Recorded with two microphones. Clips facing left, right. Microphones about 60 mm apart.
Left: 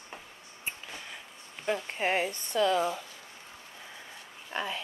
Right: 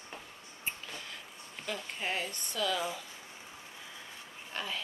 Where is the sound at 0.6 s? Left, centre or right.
Centre.